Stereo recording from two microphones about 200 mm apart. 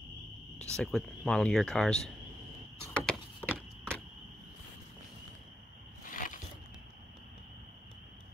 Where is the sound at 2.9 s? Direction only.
5° left (ahead or behind).